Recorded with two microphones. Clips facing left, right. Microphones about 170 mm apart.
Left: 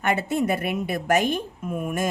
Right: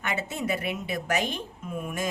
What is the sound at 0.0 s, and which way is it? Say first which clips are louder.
A woman's voice: left 8 dB; 55° left (ahead or behind).